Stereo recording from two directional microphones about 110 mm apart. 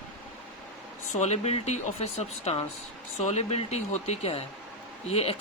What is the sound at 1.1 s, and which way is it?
Speech, 80° left.